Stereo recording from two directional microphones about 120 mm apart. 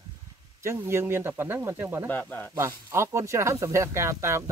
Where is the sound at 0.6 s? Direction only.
20° right (ahead or behind).